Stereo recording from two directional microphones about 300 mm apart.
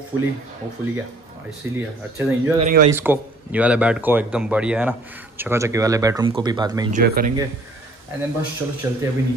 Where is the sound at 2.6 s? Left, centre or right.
Right.